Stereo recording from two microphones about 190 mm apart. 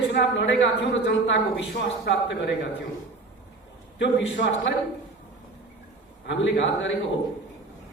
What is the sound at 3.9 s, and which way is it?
Speech, 70° left (ahead or behind).